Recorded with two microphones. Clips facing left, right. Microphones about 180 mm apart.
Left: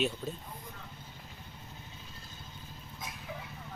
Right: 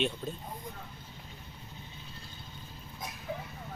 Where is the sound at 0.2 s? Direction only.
5° left (ahead or behind).